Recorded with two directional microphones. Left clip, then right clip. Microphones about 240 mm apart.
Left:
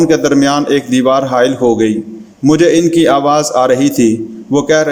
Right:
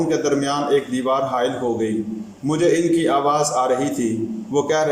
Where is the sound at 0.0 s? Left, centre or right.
Left.